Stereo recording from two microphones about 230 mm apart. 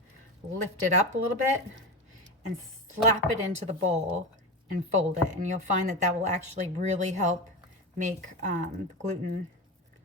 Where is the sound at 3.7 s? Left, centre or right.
Right.